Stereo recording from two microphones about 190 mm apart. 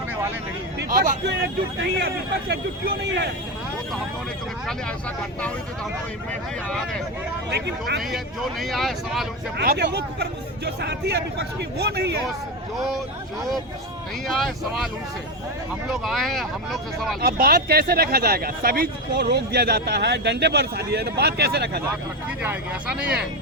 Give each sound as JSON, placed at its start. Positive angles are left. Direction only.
{"t": 0.8, "sound": "speech", "side_deg": -55}
{"t": 6.7, "sound": "speech", "side_deg": 5}
{"t": 8.0, "sound": "speech", "side_deg": 0}
{"t": 9.6, "sound": "speech", "side_deg": -60}
{"t": 14.3, "sound": "speech", "side_deg": 0}
{"t": 15.9, "sound": "speech", "side_deg": 0}
{"t": 17.2, "sound": "speech", "side_deg": -50}
{"t": 22.4, "sound": "speech", "side_deg": -5}